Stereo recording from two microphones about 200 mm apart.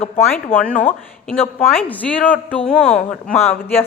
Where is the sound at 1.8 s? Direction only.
5° left (ahead or behind).